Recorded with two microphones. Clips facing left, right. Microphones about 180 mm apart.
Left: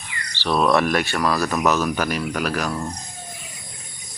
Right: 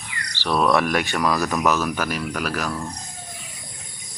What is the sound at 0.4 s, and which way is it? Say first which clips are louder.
Speech: left 1 dB; 10° right (ahead or behind).